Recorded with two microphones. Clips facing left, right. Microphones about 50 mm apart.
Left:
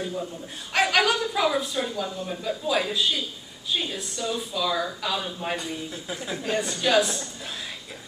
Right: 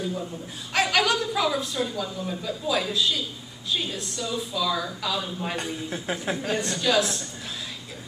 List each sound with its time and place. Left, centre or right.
0.7 s speech: centre
1.8 s speech: centre
2.2 s speech: centre
5.6 s speech: right
6.3 s speech: centre